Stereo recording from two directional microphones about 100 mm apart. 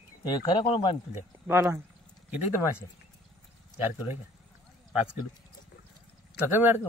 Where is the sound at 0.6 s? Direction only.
65° left (ahead or behind).